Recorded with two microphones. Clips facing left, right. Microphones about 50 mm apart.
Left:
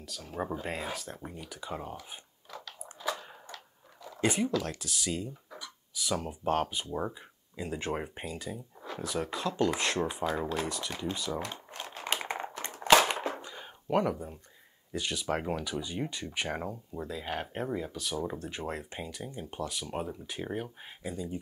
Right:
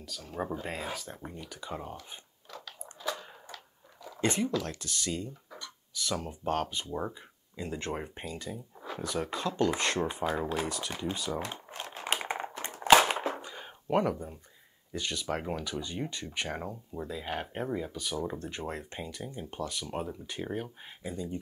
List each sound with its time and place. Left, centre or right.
0.0 s speech: centre
2.5 s biting: centre
3.4 s a sound: centre
4.2 s speech: centre
10.2 s speech: right
10.7 s speech: centre
12.2 s typing: centre
12.9 s a sound: centre
14.9 s speech: centre